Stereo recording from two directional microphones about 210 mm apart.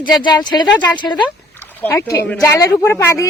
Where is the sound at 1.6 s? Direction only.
10° left (ahead or behind).